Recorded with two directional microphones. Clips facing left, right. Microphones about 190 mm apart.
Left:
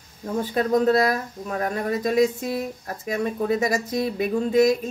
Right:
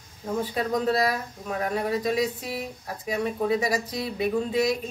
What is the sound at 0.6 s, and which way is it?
Speech, 45° left (ahead or behind).